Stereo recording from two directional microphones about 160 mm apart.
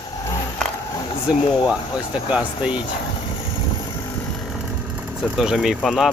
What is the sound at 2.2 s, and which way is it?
Speech, 5° right (ahead or behind).